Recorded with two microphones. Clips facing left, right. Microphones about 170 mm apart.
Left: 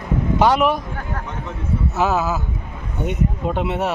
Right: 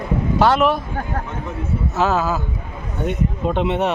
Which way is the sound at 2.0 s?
10° left (ahead or behind).